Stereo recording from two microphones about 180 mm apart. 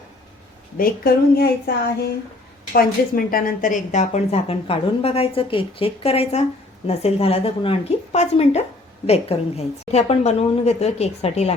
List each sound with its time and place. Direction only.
0.8 s a woman's voice: 60° left (ahead or behind); by 11.5 s 35° left (ahead or behind)